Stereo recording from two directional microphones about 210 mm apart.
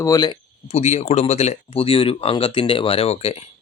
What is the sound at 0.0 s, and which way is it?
Speech, 20° left (ahead or behind).